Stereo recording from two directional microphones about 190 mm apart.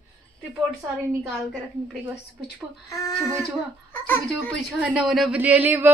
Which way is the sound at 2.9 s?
20° left (ahead or behind).